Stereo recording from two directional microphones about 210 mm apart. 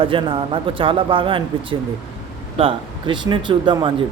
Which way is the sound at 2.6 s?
25° right (ahead or behind).